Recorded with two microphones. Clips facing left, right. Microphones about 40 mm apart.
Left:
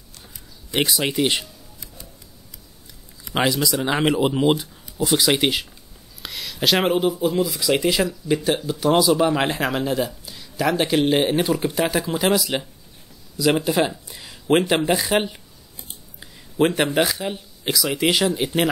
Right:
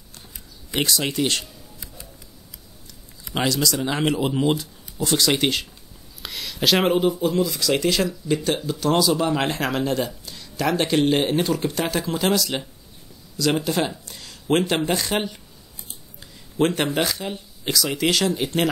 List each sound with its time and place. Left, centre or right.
0.7 s speech: centre
1.4 s music: centre
3.3 s speech: centre